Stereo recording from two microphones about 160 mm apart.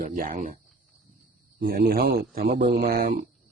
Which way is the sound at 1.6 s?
70° right (ahead or behind).